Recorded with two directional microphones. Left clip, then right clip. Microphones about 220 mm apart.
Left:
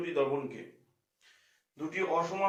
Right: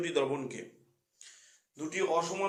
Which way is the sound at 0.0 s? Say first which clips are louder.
Even; 60° right (ahead or behind).